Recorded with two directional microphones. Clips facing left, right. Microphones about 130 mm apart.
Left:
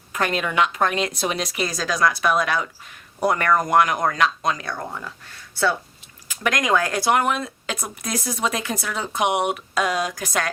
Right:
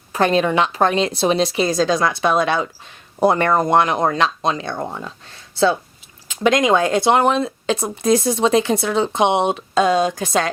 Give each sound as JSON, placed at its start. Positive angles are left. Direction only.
{"t": 0.1, "sound": "speech", "side_deg": -30}